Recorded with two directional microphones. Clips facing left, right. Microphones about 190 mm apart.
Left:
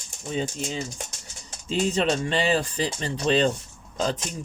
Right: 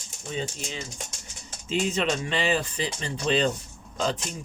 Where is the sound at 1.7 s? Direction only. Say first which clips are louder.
Left 2 dB; 35° left (ahead or behind).